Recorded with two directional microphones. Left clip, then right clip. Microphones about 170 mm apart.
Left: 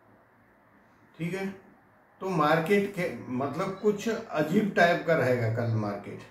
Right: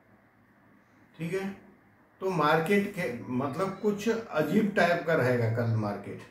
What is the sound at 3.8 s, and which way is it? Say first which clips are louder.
A man's voice: left 3 dB; 10° right (ahead or behind).